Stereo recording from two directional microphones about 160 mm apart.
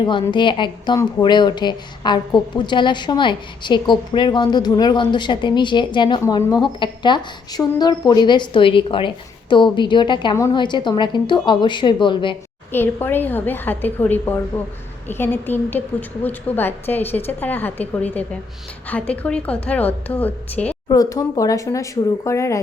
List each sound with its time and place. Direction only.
0.0 s a woman's voice: 30° left (ahead or behind)
12.7 s a woman's voice: 15° left (ahead or behind)
20.9 s a woman's voice: 20° left (ahead or behind)